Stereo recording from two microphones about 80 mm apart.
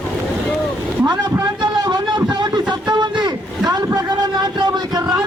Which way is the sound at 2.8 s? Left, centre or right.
Right.